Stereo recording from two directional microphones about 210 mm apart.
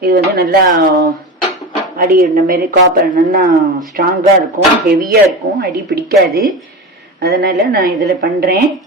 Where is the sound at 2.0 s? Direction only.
45° right (ahead or behind).